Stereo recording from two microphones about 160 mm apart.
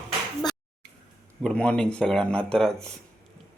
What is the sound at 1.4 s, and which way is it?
Speech, 5° left (ahead or behind).